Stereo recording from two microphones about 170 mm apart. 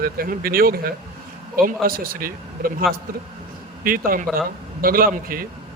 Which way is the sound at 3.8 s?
55° right (ahead or behind).